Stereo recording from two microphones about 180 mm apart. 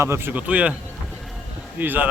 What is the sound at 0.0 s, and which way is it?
Speech, 15° right (ahead or behind).